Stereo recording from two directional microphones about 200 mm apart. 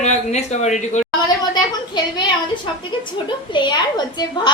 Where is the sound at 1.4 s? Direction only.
20° left (ahead or behind).